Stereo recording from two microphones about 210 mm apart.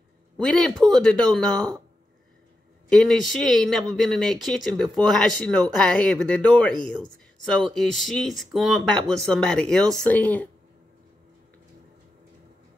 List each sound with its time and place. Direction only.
0.4 s speech: 5° left (ahead or behind)
2.9 s speech: centre (ahead or behind)